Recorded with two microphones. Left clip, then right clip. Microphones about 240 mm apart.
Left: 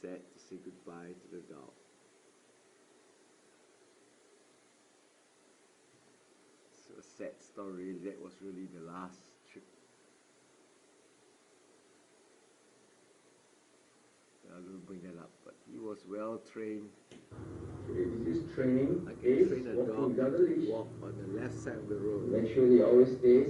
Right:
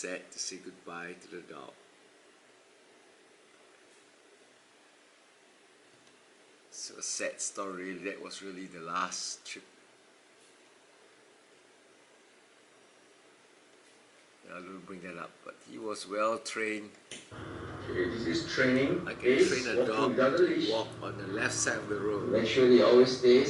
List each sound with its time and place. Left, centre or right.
0.0 s speech: centre
7.0 s speech: centre
7.5 s speech: centre
14.5 s speech: centre